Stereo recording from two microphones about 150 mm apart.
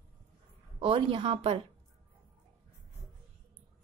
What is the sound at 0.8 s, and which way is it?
Speech, 40° right (ahead or behind).